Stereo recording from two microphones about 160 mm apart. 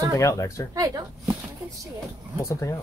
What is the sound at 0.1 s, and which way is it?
Speech, 20° left (ahead or behind).